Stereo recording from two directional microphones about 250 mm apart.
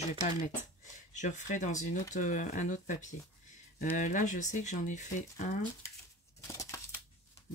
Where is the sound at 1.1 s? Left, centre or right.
Left.